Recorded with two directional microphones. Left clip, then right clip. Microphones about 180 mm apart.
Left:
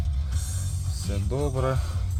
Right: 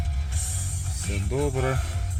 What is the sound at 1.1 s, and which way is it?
Speech, 5° left (ahead or behind).